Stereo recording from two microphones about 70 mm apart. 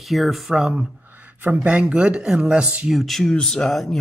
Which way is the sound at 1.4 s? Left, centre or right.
Right.